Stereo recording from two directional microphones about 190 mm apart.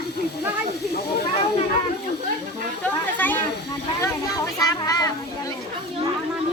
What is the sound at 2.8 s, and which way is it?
Speech, 10° left (ahead or behind).